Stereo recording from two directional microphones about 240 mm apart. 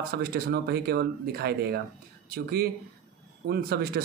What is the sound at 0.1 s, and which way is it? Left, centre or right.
Speech, right.